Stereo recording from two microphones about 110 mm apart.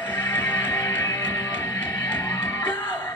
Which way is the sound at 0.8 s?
30° left (ahead or behind).